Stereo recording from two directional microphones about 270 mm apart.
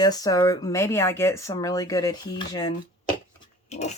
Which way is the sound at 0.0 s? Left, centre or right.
Centre.